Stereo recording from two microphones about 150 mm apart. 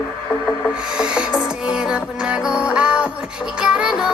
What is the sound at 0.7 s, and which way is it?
Music, 5° right (ahead or behind).